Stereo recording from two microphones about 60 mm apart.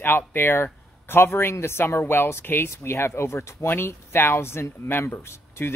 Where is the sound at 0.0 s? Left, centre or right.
Left.